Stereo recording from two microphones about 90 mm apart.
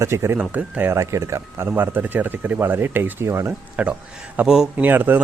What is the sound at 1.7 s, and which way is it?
Speech, 20° right (ahead or behind).